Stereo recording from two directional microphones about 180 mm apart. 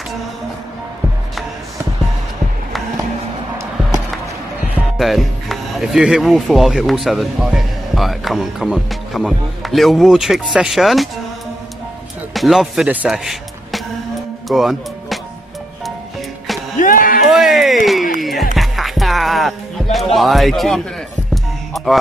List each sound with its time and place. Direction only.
4.7 s speech: centre (ahead or behind)
12.4 s speech: centre (ahead or behind)
14.5 s music: centre (ahead or behind)
16.8 s a sound: 50° left (ahead or behind)
17.3 s a sound: centre (ahead or behind)
18.2 s music: centre (ahead or behind)